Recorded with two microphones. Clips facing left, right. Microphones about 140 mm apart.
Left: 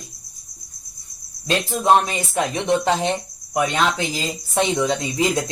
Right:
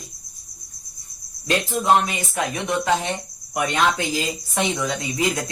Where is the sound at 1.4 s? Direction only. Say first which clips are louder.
Left 1 dB; 30° left (ahead or behind).